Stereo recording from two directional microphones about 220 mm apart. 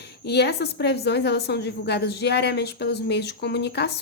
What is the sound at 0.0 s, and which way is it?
A woman's voice, 50° left (ahead or behind).